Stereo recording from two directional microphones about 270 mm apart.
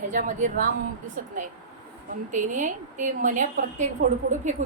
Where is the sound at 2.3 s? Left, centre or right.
Right.